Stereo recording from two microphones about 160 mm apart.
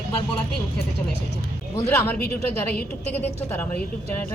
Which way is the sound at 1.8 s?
15° left (ahead or behind).